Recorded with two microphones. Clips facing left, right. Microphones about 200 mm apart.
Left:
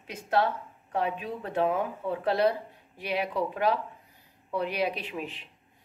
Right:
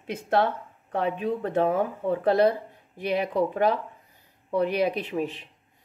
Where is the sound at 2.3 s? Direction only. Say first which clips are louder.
Right 4 dB; 50° right (ahead or behind).